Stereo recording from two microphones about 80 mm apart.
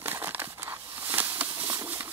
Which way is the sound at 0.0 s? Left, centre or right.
Right.